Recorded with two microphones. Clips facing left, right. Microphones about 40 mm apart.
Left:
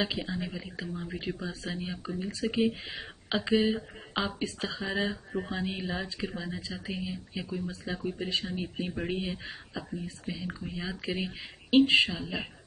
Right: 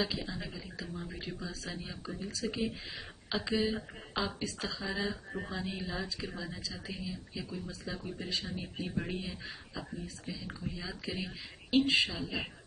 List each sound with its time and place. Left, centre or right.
0.0 s speech: left
0.9 s speech: centre
1.2 s speech: left
5.1 s speech: centre
5.5 s speech: left
11.7 s speech: left
12.1 s speech: left